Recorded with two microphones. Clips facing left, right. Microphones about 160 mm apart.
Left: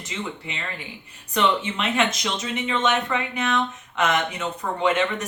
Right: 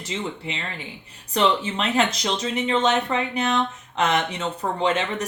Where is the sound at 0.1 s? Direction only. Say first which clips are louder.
Right 3 dB; 30° right (ahead or behind).